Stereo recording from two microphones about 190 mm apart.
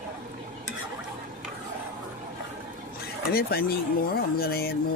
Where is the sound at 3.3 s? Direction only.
55° left (ahead or behind).